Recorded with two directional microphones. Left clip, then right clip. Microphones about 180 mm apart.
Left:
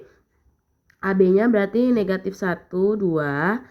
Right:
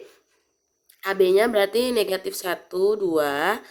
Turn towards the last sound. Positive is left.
turn(degrees=-25)  # may be behind; listen again after turning